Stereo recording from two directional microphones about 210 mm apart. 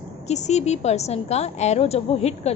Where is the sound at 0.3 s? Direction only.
35° left (ahead or behind).